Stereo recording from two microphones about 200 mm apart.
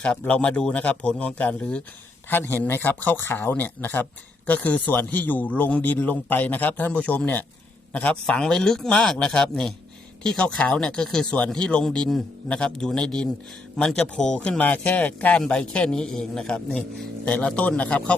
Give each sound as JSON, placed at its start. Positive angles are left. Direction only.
{"t": 0.0, "sound": "a man's voice", "side_deg": 5}